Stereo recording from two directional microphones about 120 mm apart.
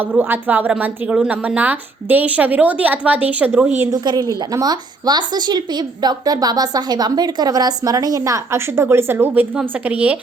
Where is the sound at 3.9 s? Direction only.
35° right (ahead or behind).